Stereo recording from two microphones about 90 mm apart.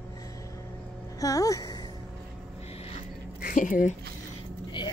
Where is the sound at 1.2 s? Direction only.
40° left (ahead or behind).